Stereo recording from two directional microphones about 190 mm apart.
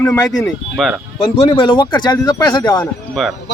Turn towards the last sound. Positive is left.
turn(degrees=0)  # may be behind; listen again after turning